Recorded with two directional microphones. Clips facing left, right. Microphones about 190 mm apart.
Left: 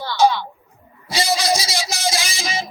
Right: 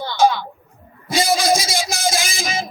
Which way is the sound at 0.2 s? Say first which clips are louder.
Even; 50° right (ahead or behind).